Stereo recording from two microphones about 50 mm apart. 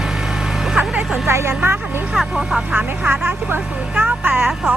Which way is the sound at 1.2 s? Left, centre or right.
Right.